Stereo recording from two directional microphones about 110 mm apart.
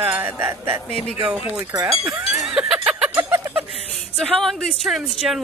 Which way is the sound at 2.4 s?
5° right (ahead or behind).